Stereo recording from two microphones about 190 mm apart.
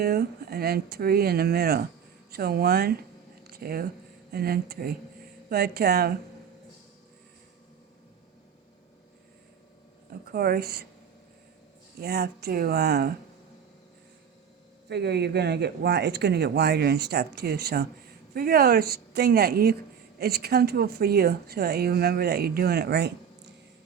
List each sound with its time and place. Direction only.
0.0 s speech: 55° right (ahead or behind)
3.4 s a sound: 55° right (ahead or behind)
4.3 s speech: 55° right (ahead or behind)
10.1 s speech: 55° right (ahead or behind)
11.9 s speech: 55° right (ahead or behind)
14.8 s speech: 60° right (ahead or behind)